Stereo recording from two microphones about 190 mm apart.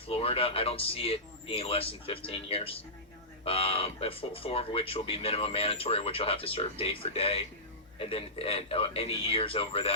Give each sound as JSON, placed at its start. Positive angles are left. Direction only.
{"t": 0.1, "sound": "speech", "side_deg": 30}